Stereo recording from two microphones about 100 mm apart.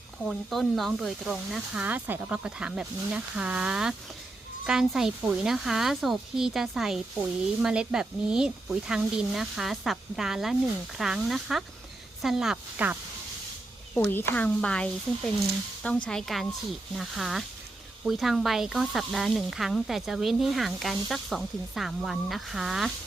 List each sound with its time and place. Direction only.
0.2 s speech: 5° left (ahead or behind)
1.7 s speech: 15° right (ahead or behind)
12.8 s speech: 15° right (ahead or behind)
13.9 s speech: 20° left (ahead or behind); by 22.9 s 5° right (ahead or behind)